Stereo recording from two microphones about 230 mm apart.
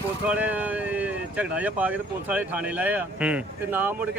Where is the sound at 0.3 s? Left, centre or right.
Centre.